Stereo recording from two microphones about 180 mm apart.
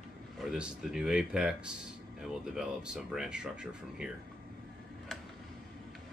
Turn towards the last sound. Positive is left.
turn(degrees=-5)  # may be behind; listen again after turning